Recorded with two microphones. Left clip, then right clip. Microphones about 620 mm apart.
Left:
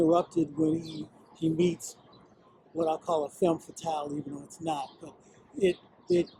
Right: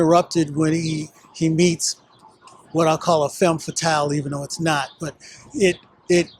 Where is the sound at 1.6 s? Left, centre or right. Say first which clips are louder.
Right 11 dB; right.